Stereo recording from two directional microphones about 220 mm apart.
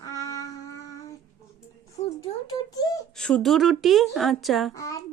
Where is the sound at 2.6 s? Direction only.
15° left (ahead or behind).